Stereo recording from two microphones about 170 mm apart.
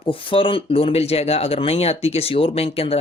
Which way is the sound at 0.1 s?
30° left (ahead or behind).